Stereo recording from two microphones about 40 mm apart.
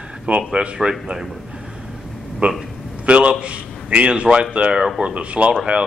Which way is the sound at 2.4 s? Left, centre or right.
Right.